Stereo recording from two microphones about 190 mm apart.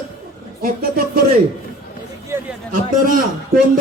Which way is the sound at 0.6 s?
50° right (ahead or behind).